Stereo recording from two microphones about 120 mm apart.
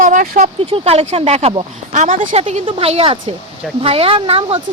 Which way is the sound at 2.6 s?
50° right (ahead or behind).